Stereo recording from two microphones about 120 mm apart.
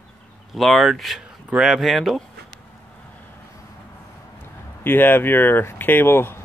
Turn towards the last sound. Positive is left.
turn(degrees=20)  # may be behind; listen again after turning